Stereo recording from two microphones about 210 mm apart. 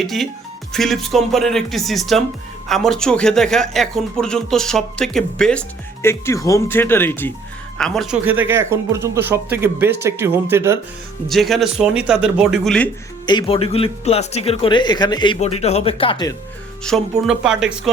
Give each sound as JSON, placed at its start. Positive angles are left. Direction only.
{"t": 0.0, "sound": "speech", "side_deg": 0}
{"t": 11.3, "sound": "speech", "side_deg": 0}
{"t": 13.2, "sound": "speech", "side_deg": 25}
{"t": 16.8, "sound": "speech", "side_deg": 0}